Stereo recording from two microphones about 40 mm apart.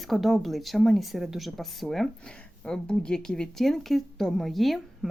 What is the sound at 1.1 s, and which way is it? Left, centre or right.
Speech, centre.